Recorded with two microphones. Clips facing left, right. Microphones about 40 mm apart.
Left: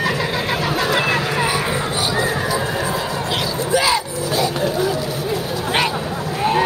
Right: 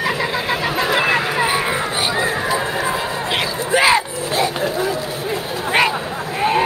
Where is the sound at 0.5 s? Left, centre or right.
Centre.